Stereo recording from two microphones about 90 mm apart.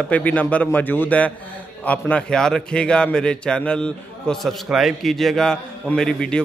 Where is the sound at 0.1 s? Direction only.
15° left (ahead or behind).